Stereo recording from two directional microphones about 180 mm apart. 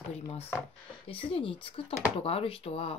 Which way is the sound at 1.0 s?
30° left (ahead or behind).